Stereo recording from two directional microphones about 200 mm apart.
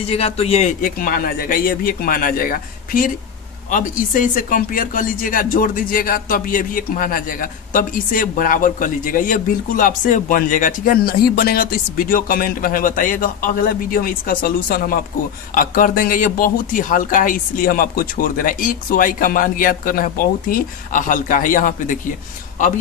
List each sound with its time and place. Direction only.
0.0 s speech: 30° left (ahead or behind)